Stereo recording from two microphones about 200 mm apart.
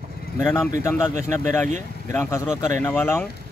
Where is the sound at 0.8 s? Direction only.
15° left (ahead or behind).